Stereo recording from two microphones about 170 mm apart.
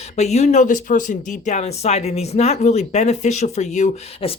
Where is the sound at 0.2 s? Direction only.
40° left (ahead or behind).